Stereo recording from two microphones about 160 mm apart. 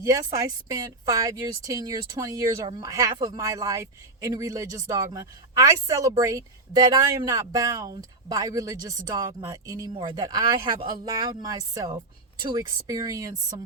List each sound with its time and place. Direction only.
0.0 s a woman's voice: 20° right (ahead or behind)